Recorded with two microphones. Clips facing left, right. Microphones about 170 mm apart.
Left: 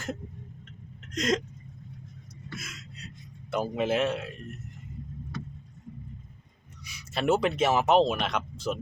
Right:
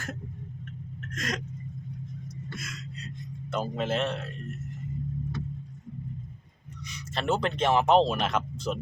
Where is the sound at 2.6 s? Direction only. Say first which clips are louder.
Right 5 dB; 5° left (ahead or behind).